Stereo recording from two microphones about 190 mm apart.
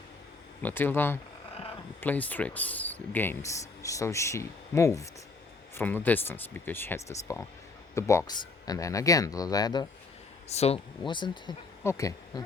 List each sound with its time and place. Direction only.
0.6 s speech: 10° left (ahead or behind)
10.5 s speech: 35° left (ahead or behind); by 12.4 s 15° left (ahead or behind)